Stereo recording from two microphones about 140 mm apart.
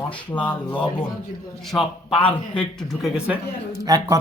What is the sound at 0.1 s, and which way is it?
Speech, 10° left (ahead or behind).